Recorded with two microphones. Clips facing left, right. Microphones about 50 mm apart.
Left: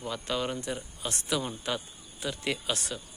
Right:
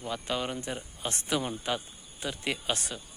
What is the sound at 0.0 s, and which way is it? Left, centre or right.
Speech, centre.